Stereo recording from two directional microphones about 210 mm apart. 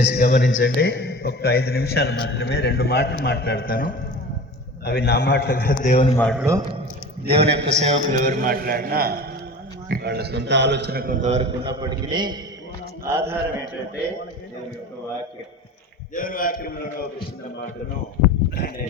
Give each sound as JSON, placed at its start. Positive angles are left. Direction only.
{"t": 0.0, "sound": "music", "side_deg": 50}
{"t": 0.5, "sound": "a man's voice", "side_deg": 60}
{"t": 5.8, "sound": "a man's voice", "side_deg": 35}
{"t": 6.1, "sound": "a man's voice", "side_deg": 5}
{"t": 7.3, "sound": "a man's voice", "side_deg": -25}
{"t": 16.1, "sound": "a man's voice", "side_deg": 40}